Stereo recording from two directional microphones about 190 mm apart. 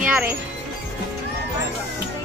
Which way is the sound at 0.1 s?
10° right (ahead or behind).